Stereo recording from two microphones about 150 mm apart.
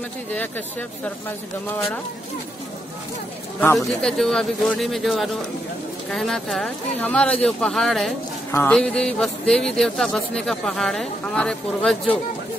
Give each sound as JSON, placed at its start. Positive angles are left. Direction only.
{"t": 0.3, "sound": "speech", "side_deg": 10}
{"t": 3.7, "sound": "speech", "side_deg": 0}
{"t": 8.5, "sound": "speech", "side_deg": 15}
{"t": 8.7, "sound": "speech", "side_deg": 5}